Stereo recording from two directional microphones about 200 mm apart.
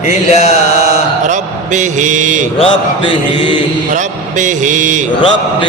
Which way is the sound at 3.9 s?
40° right (ahead or behind).